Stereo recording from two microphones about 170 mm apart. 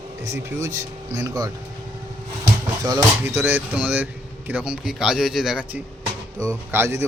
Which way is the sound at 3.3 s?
10° right (ahead or behind).